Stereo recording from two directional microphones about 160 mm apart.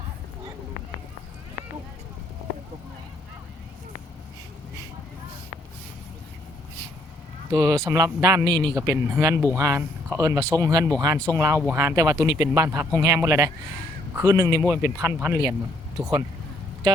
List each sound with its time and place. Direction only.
7.5 s speech: 25° right (ahead or behind)